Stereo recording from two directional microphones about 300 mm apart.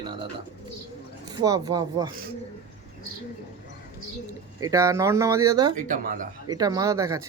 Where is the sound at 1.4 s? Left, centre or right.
Centre.